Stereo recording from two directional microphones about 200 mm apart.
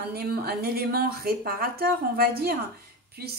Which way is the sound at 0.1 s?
50° right (ahead or behind).